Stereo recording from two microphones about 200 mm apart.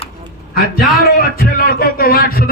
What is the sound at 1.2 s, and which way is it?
A man's voice, 45° left (ahead or behind).